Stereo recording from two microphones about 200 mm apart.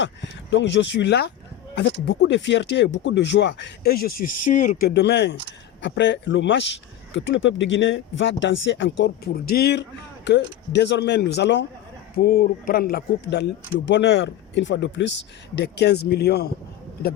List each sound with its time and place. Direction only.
0.0 s speech: 65° left (ahead or behind); by 4.9 s 40° left (ahead or behind)
4.9 s speech: 55° left (ahead or behind)